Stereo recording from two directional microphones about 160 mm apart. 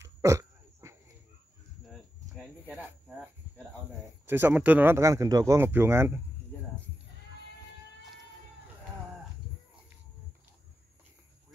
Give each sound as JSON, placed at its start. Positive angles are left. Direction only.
{"t": 0.0, "sound": "throat clearing", "side_deg": -20}
{"t": 2.6, "sound": "cricket", "side_deg": -10}
{"t": 4.3, "sound": "speech", "side_deg": -15}